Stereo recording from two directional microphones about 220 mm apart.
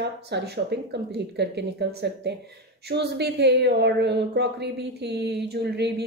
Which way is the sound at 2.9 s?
50° right (ahead or behind).